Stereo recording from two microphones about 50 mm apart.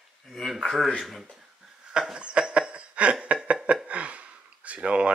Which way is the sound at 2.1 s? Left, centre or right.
Right.